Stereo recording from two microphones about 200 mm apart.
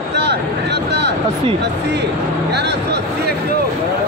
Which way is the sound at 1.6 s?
60° right (ahead or behind).